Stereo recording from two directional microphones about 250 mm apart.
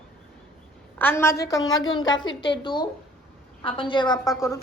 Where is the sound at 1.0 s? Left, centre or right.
Centre.